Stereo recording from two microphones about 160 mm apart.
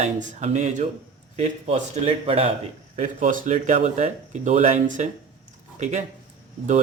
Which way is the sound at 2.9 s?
50° right (ahead or behind).